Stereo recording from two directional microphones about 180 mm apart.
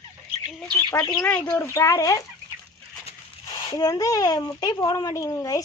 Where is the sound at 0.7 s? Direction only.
15° left (ahead or behind).